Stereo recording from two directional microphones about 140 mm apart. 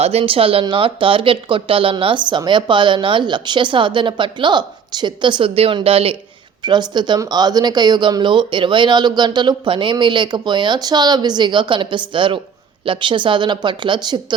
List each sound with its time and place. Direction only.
0.0 s speech: 45° right (ahead or behind)
6.6 s speech: 30° right (ahead or behind)